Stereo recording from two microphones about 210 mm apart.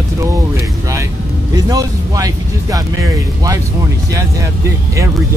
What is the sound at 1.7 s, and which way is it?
Speech, 15° right (ahead or behind).